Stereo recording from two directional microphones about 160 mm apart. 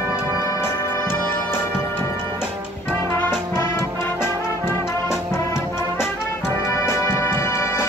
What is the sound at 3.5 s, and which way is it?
Music, 15° left (ahead or behind).